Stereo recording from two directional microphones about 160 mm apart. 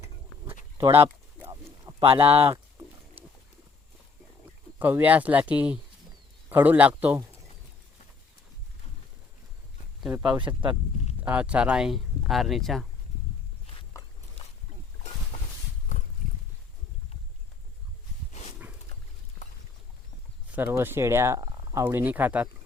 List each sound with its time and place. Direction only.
0.8 s speech: 15° right (ahead or behind)
1.4 s a sound: 20° right (ahead or behind)
2.0 s speech: 35° right (ahead or behind)
4.8 s speech: 10° right (ahead or behind)
10.0 s speech: 5° right (ahead or behind)
10.2 s speech: 30° right (ahead or behind)
11.3 s speech: 10° right (ahead or behind)
15.3 s horse: 55° left (ahead or behind)
20.5 s speech: 15° right (ahead or behind)